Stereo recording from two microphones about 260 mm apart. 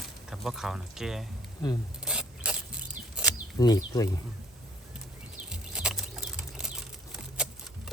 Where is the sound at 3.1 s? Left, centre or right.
Centre.